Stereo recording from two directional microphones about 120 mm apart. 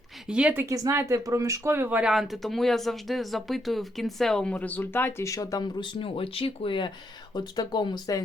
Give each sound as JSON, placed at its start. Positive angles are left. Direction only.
{"t": 0.3, "sound": "speech", "side_deg": -10}
{"t": 0.6, "sound": "speech", "side_deg": -25}
{"t": 4.5, "sound": "speech", "side_deg": 15}